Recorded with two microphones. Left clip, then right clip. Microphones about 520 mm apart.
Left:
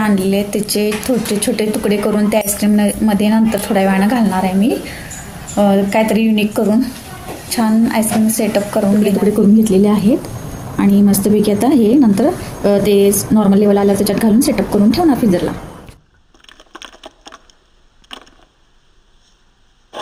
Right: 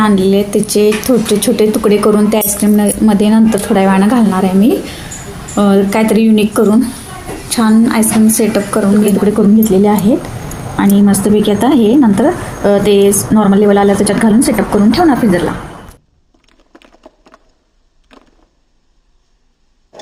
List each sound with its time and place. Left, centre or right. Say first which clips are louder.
0.0 s a woman's voice: right 5 dB; left